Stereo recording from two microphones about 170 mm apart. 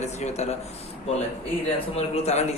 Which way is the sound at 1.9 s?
40° left (ahead or behind).